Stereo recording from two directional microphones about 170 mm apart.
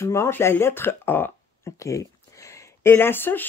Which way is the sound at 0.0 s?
15° left (ahead or behind).